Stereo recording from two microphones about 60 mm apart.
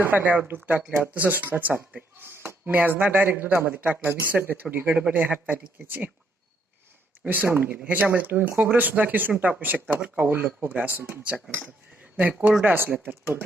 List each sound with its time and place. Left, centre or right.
0.0 s speech: right
2.1 s a sound: right
2.6 s speech: right
7.3 s speech: right
10.2 s speech: right